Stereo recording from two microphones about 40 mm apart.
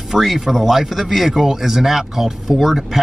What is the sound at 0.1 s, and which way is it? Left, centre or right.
Speech, centre.